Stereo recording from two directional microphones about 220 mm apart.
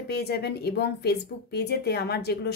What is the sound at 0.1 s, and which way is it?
Speech, 45° left (ahead or behind).